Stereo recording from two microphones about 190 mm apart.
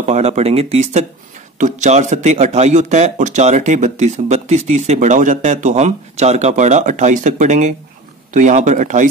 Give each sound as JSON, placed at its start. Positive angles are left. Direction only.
{"t": 0.0, "sound": "speech", "side_deg": -35}